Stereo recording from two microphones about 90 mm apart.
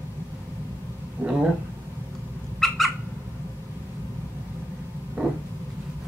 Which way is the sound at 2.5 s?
Centre (ahead or behind).